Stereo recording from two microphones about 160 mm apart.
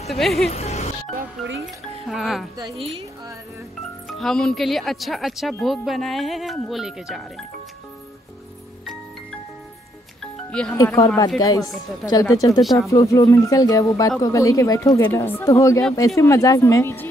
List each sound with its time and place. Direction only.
0.1 s a woman's voice: centre (ahead or behind)
0.5 s speech: 45° left (ahead or behind)
1.4 s a woman's voice: centre (ahead or behind)
2.5 s a woman's voice: 25° right (ahead or behind)
4.2 s a woman's voice: 5° left (ahead or behind)
10.5 s speech: 5° left (ahead or behind)
10.9 s speech: 20° left (ahead or behind)